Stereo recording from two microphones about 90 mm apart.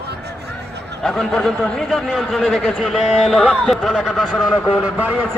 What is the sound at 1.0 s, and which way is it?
A man's voice, 5° left (ahead or behind).